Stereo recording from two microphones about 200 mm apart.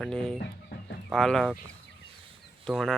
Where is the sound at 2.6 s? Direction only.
Centre (ahead or behind).